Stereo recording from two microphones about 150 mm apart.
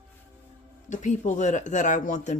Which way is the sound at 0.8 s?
55° left (ahead or behind).